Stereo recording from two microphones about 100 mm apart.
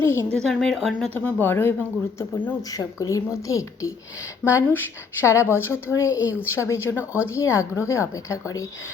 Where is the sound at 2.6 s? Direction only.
35° left (ahead or behind).